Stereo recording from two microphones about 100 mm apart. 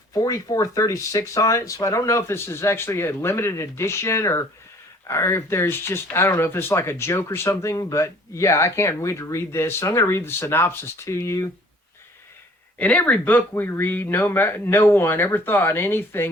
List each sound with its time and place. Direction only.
0.1 s speech: 35° left (ahead or behind)
12.8 s speech: 15° left (ahead or behind)